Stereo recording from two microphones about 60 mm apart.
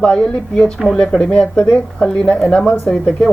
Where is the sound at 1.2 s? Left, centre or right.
Centre.